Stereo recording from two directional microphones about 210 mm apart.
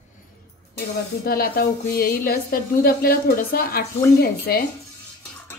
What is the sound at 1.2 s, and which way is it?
A woman's voice, 45° left (ahead or behind).